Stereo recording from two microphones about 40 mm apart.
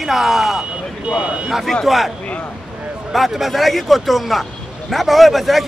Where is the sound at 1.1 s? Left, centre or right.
Right.